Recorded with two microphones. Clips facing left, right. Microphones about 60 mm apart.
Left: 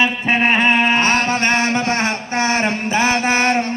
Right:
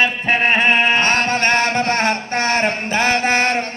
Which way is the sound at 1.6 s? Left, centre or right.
Right.